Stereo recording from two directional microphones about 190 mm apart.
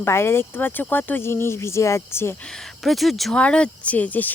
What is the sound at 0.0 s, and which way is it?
Speech, 15° left (ahead or behind).